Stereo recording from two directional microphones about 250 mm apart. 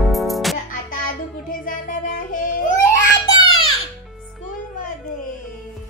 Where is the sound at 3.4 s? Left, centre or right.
Left.